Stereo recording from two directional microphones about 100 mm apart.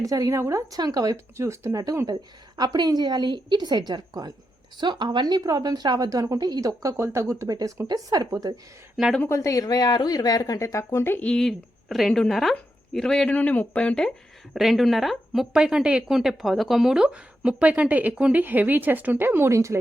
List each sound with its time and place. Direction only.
0.0 s a woman's voice: 35° right (ahead or behind)
9.2 s speech: 30° left (ahead or behind)
11.3 s speech: 5° left (ahead or behind)
14.5 s speech: centre (ahead or behind); by 19.8 s 30° right (ahead or behind)